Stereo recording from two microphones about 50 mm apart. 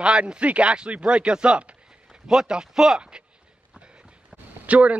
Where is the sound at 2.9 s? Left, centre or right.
Centre.